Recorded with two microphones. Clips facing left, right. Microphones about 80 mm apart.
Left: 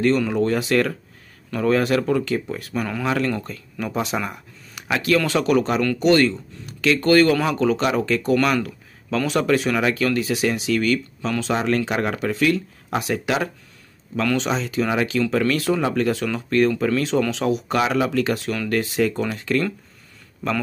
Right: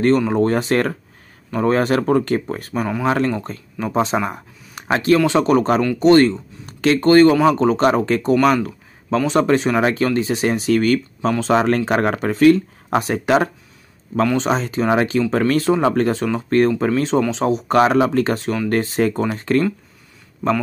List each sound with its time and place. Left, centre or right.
0.3 s speech: right
2.7 s speech: right